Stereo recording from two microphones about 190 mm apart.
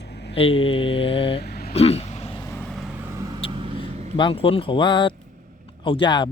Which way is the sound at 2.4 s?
10° left (ahead or behind).